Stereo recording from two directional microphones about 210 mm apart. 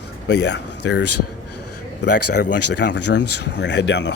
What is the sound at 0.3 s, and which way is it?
Speech, 55° left (ahead or behind).